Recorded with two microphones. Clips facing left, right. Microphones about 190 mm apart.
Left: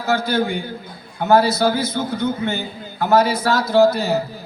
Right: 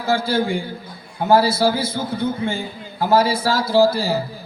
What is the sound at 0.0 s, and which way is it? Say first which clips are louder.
A man's voice: even; 30° right (ahead or behind).